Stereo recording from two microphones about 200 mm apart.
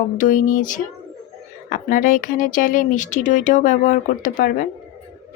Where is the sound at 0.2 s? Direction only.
40° left (ahead or behind).